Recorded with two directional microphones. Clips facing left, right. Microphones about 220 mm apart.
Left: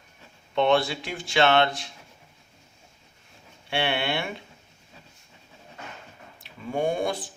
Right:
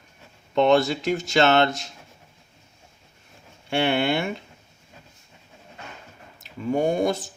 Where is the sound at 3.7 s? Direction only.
45° right (ahead or behind).